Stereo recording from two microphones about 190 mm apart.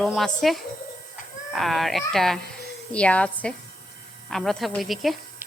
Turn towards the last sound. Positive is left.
turn(degrees=0)  # may be behind; listen again after turning